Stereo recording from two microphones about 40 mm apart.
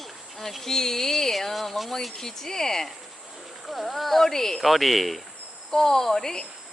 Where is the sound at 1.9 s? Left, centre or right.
Centre.